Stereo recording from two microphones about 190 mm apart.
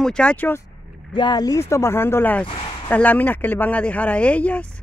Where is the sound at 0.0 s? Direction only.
5° left (ahead or behind).